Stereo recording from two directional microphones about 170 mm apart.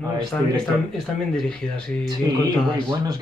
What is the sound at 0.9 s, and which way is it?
Speech, 5° left (ahead or behind).